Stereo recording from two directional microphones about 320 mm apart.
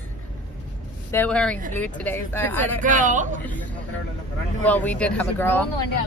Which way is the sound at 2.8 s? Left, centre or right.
Right.